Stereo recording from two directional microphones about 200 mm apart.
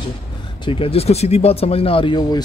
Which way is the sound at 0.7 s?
30° left (ahead or behind).